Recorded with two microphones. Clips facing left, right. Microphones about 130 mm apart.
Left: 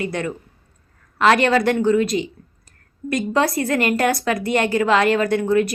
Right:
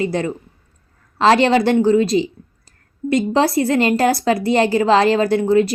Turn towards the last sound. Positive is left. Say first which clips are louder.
# right 3 dB
turn(degrees=-30)  # may be behind; listen again after turning